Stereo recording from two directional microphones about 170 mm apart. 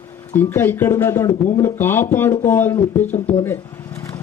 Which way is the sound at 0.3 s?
15° left (ahead or behind).